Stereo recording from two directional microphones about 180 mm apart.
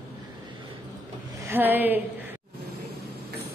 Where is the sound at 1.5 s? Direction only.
10° right (ahead or behind).